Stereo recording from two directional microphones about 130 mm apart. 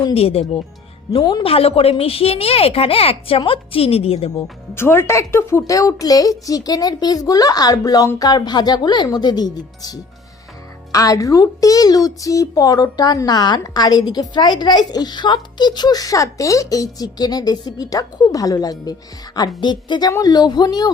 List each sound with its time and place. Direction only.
0.1 s a woman's voice: 50° left (ahead or behind)
1.2 s a woman's voice: 35° left (ahead or behind)
1.5 s a woman's voice: 45° left (ahead or behind)
4.7 s a woman's voice: 20° left (ahead or behind)